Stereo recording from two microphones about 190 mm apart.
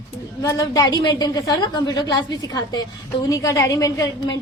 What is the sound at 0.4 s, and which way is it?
A woman's voice, 15° left (ahead or behind).